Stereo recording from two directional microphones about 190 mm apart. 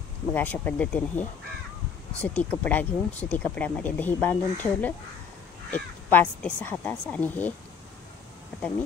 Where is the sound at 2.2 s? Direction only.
10° left (ahead or behind).